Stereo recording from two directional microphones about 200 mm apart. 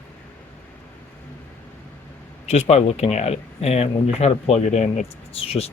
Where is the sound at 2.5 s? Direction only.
35° left (ahead or behind).